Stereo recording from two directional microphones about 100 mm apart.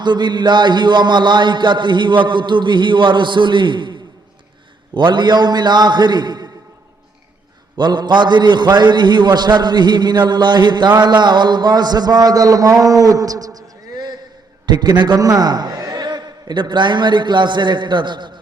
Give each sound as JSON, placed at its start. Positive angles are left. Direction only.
{"t": 0.0, "sound": "a man's voice", "side_deg": -50}
{"t": 7.8, "sound": "a man's voice", "side_deg": -50}